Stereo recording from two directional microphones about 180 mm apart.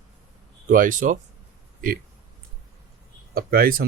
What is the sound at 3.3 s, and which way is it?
Speech, 55° right (ahead or behind).